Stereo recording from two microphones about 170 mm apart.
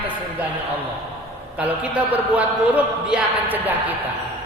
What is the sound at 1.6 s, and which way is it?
A man's voice, 10° right (ahead or behind).